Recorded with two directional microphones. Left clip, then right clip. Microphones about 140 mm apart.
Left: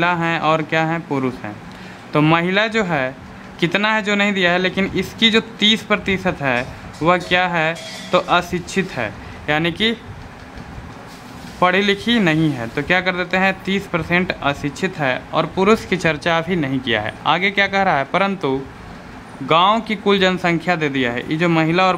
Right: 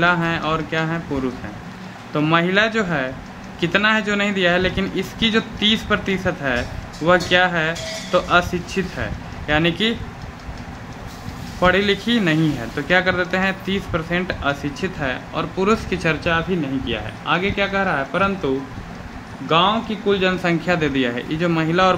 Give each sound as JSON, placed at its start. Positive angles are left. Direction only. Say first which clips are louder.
{"t": 0.0, "sound": "speech", "louder": "left 1 dB", "side_deg": 60}
{"t": 11.6, "sound": "speech", "louder": "left 1 dB", "side_deg": 50}
{"t": 16.3, "sound": "speech", "louder": "left 2 dB", "side_deg": 90}
{"t": 19.5, "sound": "speech", "louder": "left 3 dB", "side_deg": 90}
{"t": 20.4, "sound": "speech", "louder": "left 1 dB", "side_deg": 45}